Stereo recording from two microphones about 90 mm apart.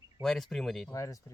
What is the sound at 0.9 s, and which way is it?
Speech, 35° left (ahead or behind).